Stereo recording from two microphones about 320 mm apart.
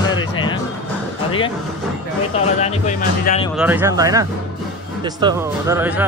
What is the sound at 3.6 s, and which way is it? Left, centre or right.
Speech, centre.